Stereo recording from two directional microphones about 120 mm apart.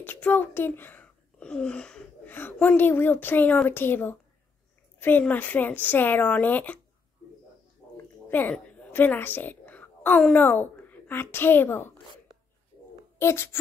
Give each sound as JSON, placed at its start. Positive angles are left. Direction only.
{"t": 0.0, "sound": "speech", "side_deg": 15}
{"t": 8.3, "sound": "a woman's voice", "side_deg": 15}
{"t": 13.2, "sound": "speech", "side_deg": 20}